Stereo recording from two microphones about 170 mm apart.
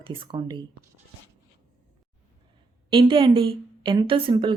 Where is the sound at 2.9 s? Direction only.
30° right (ahead or behind).